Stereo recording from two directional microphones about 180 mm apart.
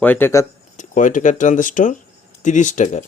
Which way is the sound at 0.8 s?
45° left (ahead or behind).